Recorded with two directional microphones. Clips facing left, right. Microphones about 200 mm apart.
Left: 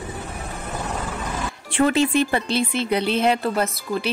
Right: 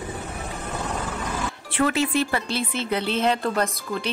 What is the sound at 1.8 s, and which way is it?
Speech, 25° left (ahead or behind).